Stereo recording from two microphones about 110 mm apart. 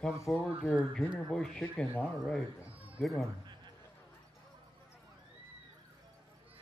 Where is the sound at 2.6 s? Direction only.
15° right (ahead or behind).